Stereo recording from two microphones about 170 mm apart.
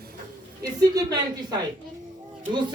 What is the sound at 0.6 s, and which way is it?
A man's voice, 20° right (ahead or behind).